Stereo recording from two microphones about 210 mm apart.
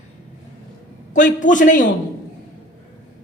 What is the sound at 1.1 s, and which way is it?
Speech, 35° left (ahead or behind).